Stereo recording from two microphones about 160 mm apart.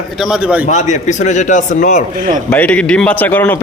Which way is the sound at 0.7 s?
45° left (ahead or behind).